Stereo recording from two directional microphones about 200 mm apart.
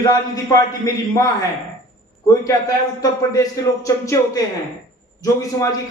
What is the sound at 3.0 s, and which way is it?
Speech, 15° left (ahead or behind).